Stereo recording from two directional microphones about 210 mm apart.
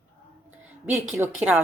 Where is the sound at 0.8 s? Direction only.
5° right (ahead or behind).